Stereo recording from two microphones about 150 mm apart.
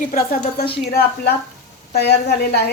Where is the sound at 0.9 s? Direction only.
90° left.